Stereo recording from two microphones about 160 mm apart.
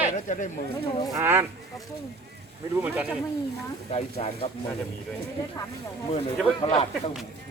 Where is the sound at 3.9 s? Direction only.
40° left (ahead or behind).